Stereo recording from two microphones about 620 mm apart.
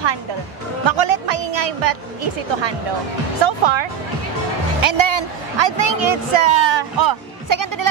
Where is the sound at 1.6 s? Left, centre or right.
Right.